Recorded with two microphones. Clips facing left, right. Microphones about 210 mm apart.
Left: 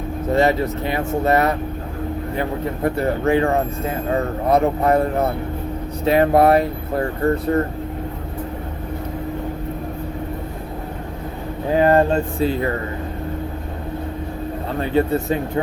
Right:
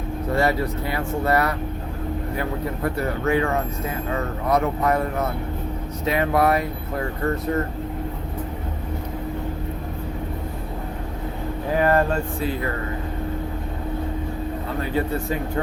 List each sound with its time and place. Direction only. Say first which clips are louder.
0.3 s speech: left 4 dB; 20° left (ahead or behind)
11.7 s speech: left 5 dB; 25° left (ahead or behind)
14.9 s speech: left 7 dB; 25° left (ahead or behind)